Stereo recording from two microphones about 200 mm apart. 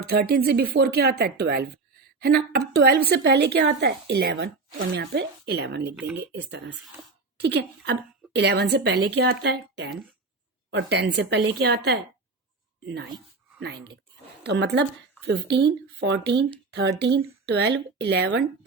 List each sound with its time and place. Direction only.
0.0 s a woman's voice: 55° right (ahead or behind)
12.8 s speech: 65° right (ahead or behind)
14.4 s a woman's voice: 55° right (ahead or behind)